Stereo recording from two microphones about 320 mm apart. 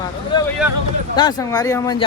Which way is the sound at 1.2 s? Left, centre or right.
Centre.